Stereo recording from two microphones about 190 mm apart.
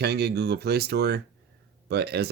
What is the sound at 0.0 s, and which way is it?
Speech, 60° right (ahead or behind).